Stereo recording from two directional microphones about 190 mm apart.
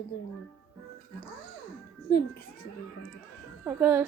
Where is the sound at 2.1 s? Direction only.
55° left (ahead or behind).